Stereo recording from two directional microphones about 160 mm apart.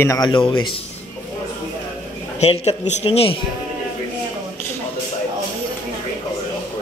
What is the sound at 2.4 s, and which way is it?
Speech, 40° left (ahead or behind).